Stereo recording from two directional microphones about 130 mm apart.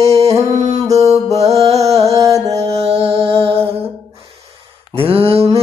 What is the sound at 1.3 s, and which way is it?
Music, 55° right (ahead or behind).